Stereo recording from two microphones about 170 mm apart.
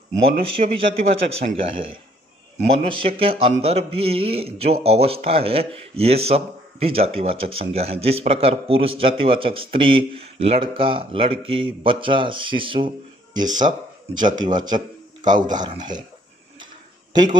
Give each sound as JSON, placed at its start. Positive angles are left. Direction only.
{"t": 0.2, "sound": "a man's voice", "side_deg": -30}
{"t": 17.1, "sound": "a man's voice", "side_deg": -25}